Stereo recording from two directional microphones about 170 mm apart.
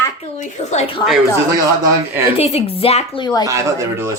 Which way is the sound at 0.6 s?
35° left (ahead or behind).